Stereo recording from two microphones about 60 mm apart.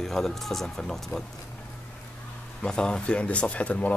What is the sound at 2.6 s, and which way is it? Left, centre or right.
Speech, centre.